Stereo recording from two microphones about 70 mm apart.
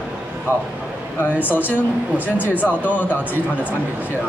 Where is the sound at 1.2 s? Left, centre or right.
Left.